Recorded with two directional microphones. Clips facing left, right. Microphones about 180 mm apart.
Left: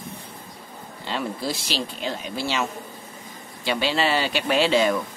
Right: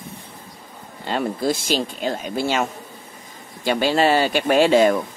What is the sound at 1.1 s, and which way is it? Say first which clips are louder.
Speech: right 6 dB; 50° right (ahead or behind).